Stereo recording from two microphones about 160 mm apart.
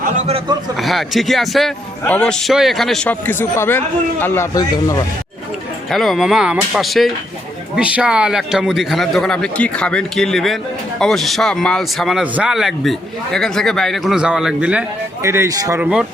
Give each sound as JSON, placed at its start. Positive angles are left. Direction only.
{"t": 0.3, "sound": "a man's voice", "side_deg": -35}
{"t": 0.8, "sound": "a man's voice", "side_deg": 0}
{"t": 5.9, "sound": "a man's voice", "side_deg": 0}
{"t": 15.8, "sound": "speech", "side_deg": -5}